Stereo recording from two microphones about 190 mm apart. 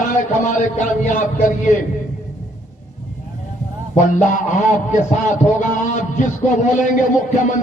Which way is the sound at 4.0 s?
40° left (ahead or behind).